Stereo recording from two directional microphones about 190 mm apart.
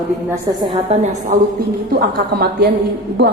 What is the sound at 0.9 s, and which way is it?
Speech, 40° right (ahead or behind).